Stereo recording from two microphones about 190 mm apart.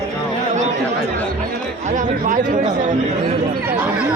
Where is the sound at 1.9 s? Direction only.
45° right (ahead or behind).